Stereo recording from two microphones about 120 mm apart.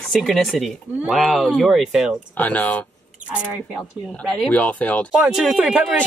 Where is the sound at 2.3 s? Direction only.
15° left (ahead or behind).